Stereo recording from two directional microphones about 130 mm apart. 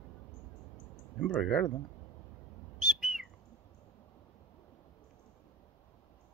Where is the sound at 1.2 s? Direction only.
Centre (ahead or behind).